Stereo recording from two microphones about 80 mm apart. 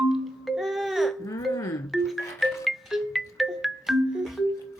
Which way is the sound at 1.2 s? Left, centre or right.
Left.